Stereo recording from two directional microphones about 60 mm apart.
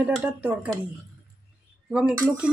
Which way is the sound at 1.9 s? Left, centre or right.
Centre.